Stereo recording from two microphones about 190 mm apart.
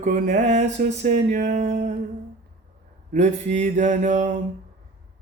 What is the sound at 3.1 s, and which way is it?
Mantra, 40° right (ahead or behind).